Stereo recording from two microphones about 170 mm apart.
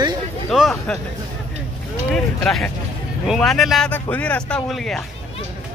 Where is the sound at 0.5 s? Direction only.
Centre (ahead or behind).